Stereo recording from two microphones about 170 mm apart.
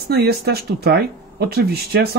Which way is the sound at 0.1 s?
70° right (ahead or behind).